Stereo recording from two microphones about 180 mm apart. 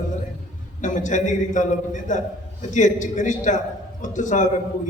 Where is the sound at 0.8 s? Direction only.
45° left (ahead or behind).